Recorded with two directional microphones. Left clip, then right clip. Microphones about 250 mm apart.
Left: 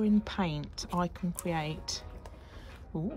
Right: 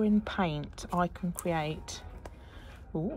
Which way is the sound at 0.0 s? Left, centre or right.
Centre.